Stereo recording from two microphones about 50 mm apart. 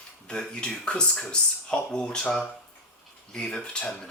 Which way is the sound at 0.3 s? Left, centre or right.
Centre.